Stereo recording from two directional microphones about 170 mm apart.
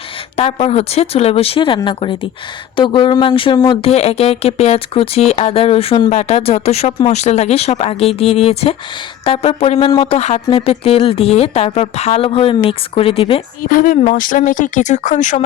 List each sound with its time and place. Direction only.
0.3 s speech: 35° left (ahead or behind)
13.7 s speech: 55° left (ahead or behind)